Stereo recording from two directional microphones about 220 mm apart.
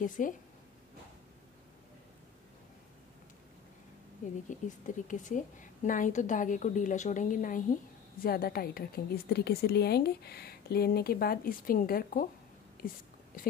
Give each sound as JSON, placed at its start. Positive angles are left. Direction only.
{"t": 0.0, "sound": "a woman's voice", "side_deg": 35}
{"t": 4.5, "sound": "a woman's voice", "side_deg": 35}